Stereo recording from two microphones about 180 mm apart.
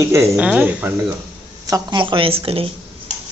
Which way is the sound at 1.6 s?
20° right (ahead or behind).